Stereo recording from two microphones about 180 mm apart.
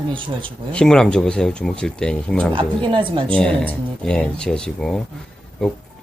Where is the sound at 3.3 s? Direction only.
5° left (ahead or behind).